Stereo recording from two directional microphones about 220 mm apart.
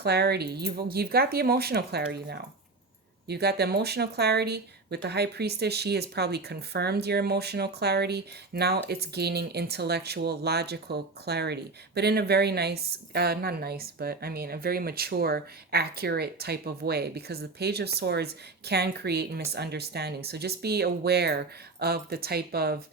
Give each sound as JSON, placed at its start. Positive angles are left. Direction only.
{"t": 0.0, "sound": "speech", "side_deg": -45}